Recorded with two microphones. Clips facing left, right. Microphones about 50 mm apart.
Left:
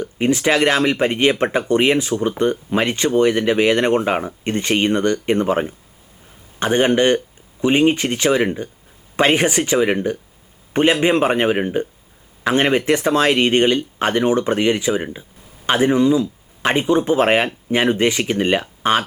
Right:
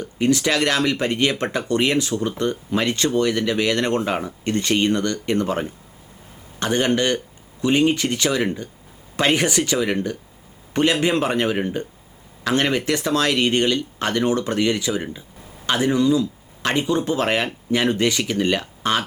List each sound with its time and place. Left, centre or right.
0.0 s speech: left